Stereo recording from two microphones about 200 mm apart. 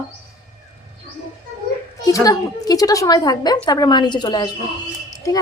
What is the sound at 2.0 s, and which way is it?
A woman's voice, 15° left (ahead or behind).